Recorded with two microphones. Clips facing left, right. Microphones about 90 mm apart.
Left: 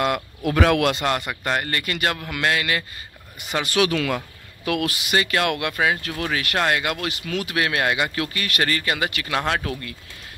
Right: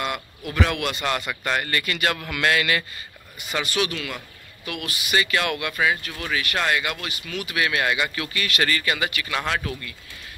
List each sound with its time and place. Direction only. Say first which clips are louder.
0.0 s speech: left 6 dB; 60° left (ahead or behind); by 0.9 s 85° left
1.4 s a man's voice: left 1 dB; 40° left (ahead or behind)
2.3 s a man's voice: right 2 dB; 25° left (ahead or behind)
3.6 s speech: left 8 dB; 75° left (ahead or behind)
4.6 s speech: left 9 dB; 90° left
5.1 s speech: left 1 dB; 50° left (ahead or behind)